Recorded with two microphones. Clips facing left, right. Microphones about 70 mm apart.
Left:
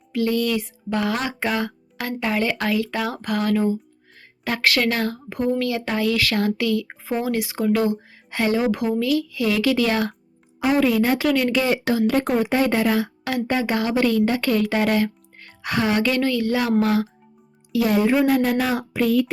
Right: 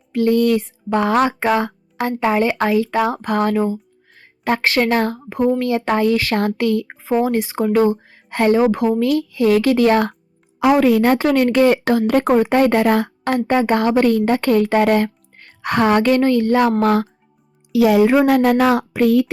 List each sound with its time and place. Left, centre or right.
0.1 s speech: right
6.8 s speech: right
10.6 s a woman's voice: right
10.8 s a woman's voice: right
11.2 s speech: right
17.7 s a woman's voice: right